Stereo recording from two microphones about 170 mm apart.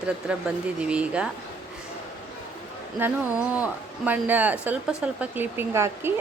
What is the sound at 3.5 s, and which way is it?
Speech, 10° right (ahead or behind).